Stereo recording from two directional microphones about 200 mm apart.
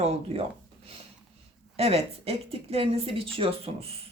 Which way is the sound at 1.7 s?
30° right (ahead or behind).